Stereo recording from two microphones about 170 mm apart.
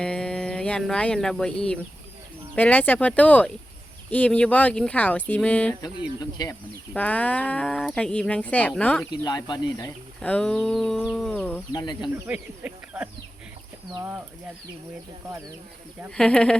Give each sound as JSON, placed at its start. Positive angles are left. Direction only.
{"t": 0.0, "sound": "speech", "side_deg": 5}
{"t": 5.8, "sound": "speech", "side_deg": 25}
{"t": 6.9, "sound": "speech", "side_deg": 10}
{"t": 9.2, "sound": "speech", "side_deg": 25}
{"t": 10.2, "sound": "speech", "side_deg": 5}
{"t": 11.7, "sound": "speech", "side_deg": 25}
{"t": 12.1, "sound": "speech", "side_deg": -10}
{"t": 15.3, "sound": "speech", "side_deg": -20}
{"t": 16.0, "sound": "speech", "side_deg": 5}